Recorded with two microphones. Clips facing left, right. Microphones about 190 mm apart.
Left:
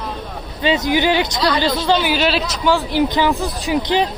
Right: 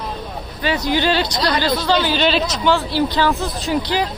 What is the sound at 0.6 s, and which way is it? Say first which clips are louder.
Speech: left 2 dB; 20° left (ahead or behind).